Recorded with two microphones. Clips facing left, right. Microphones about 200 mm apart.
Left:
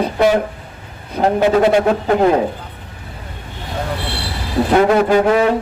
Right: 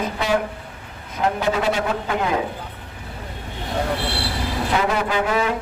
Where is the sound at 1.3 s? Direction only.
55° left (ahead or behind).